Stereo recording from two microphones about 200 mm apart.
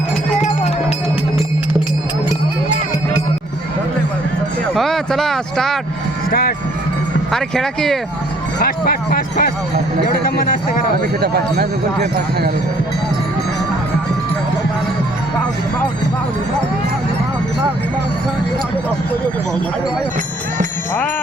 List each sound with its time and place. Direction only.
0.3 s music: 35° left (ahead or behind)
4.7 s speech: centre (ahead or behind)
7.3 s speech: centre (ahead or behind)
8.5 s speech: 50° left (ahead or behind)
11.2 s speech: 55° right (ahead or behind)